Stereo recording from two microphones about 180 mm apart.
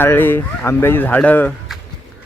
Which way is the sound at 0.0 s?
10° left (ahead or behind).